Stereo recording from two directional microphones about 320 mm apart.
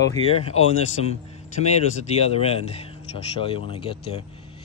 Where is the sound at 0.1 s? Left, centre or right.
Centre.